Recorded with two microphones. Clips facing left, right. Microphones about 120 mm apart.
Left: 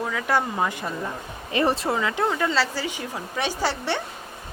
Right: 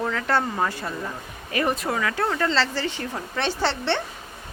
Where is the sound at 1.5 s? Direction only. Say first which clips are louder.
Left 2 dB; 30° left (ahead or behind); by 4.0 s 10° left (ahead or behind).